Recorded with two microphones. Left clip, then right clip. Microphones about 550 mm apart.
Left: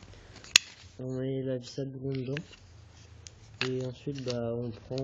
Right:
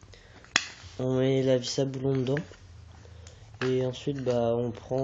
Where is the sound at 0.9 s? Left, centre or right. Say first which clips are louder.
Right 9 dB; left.